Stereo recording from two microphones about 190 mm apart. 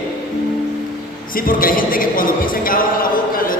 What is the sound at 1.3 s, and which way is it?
Speech, 50° left (ahead or behind).